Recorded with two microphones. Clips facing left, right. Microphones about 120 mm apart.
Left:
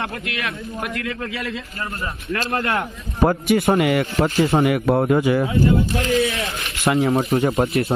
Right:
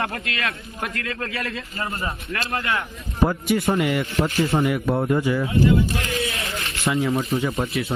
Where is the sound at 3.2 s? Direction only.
65° left (ahead or behind).